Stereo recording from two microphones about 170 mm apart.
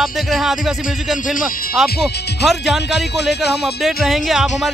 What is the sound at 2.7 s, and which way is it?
Speech, 90° left.